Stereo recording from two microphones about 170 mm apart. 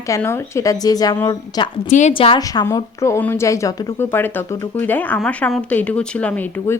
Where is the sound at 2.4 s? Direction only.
20° left (ahead or behind).